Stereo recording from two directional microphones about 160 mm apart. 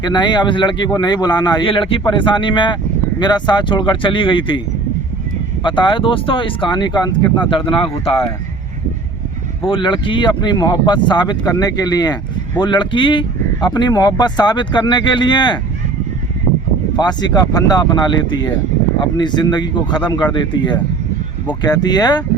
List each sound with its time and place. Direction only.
0.0 s speech: 25° left (ahead or behind)
5.6 s speech: 30° left (ahead or behind)
9.6 s speech: 30° left (ahead or behind)
17.0 s speech: 25° left (ahead or behind)